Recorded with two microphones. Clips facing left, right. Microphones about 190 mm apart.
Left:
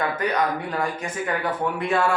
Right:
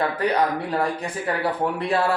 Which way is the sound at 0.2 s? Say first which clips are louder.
Right 2 dB; 35° right (ahead or behind).